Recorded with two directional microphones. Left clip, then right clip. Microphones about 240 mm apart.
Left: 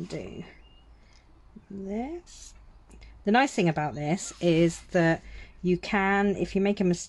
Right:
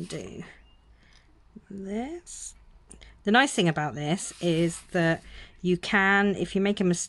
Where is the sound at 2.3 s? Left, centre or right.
Centre.